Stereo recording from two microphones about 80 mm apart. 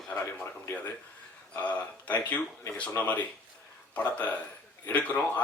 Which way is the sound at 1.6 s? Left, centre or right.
Centre.